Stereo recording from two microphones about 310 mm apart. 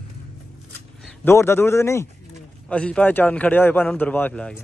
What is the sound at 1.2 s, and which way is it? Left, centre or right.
A man's voice, centre.